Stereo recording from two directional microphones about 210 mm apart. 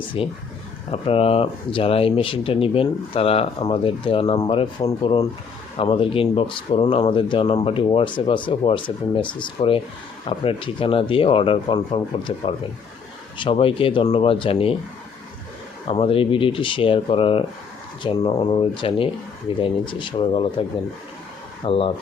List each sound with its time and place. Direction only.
0.2 s speech: 25° left (ahead or behind)
15.9 s speech: 25° left (ahead or behind)